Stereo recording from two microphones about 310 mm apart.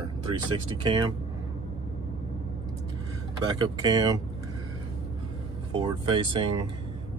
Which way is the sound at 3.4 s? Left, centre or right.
Centre.